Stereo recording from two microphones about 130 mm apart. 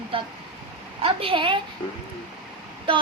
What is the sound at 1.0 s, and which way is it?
Speech, 40° right (ahead or behind).